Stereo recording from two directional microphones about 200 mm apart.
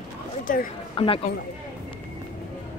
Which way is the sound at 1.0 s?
25° left (ahead or behind).